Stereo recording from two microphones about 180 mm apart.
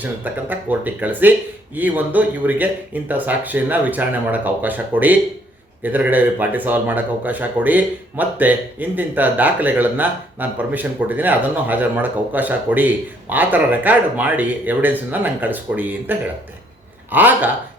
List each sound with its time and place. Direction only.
0.0 s speech: 10° right (ahead or behind)